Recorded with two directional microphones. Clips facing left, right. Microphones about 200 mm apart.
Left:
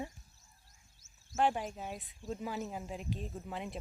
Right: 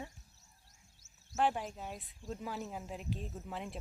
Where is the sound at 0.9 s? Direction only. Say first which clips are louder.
Left 3 dB; 65° right (ahead or behind).